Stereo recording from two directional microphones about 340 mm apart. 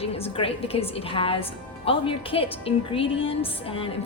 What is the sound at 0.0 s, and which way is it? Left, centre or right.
A woman's voice, centre.